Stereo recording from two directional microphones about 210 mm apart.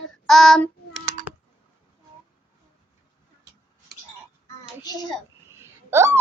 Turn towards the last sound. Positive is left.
turn(degrees=-15)  # may be behind; listen again after turning